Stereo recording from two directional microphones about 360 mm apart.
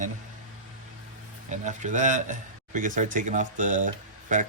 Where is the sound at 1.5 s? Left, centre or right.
Centre.